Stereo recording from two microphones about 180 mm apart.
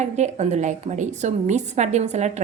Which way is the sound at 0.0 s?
40° right (ahead or behind).